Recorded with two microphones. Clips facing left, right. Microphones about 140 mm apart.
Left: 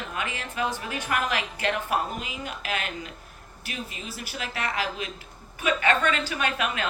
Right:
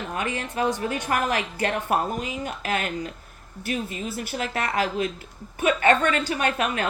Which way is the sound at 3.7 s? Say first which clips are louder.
Right 8 dB; 50° right (ahead or behind).